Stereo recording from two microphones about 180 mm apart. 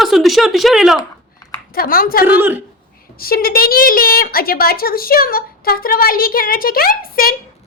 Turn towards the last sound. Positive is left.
turn(degrees=55)  # may be behind; listen again after turning